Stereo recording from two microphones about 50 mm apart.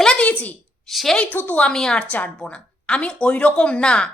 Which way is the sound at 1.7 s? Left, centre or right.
Centre.